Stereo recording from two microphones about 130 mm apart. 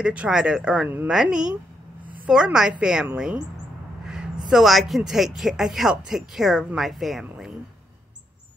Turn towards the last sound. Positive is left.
turn(degrees=0)  # may be behind; listen again after turning